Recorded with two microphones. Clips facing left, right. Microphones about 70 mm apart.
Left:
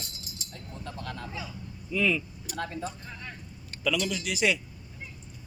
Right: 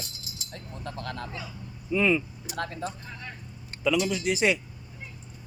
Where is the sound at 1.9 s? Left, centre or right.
Right.